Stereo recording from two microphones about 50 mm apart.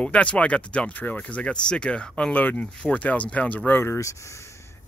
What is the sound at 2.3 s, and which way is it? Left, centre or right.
Speech, left.